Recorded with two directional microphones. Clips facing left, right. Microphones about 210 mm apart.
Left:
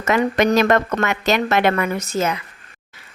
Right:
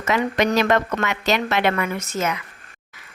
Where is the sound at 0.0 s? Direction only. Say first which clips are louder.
Left 3 dB; 50° left (ahead or behind).